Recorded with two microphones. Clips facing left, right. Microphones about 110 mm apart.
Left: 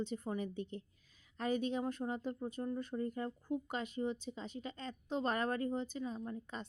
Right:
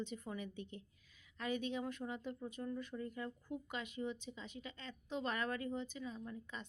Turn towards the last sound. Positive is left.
turn(degrees=40)  # may be behind; listen again after turning